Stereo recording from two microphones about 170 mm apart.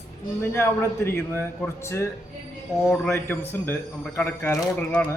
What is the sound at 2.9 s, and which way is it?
Speech, 10° left (ahead or behind).